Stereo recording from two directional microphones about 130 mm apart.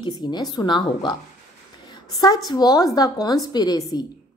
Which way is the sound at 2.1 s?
30° left (ahead or behind).